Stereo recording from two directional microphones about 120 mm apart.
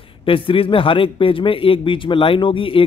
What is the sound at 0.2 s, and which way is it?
A man's voice, 50° left (ahead or behind).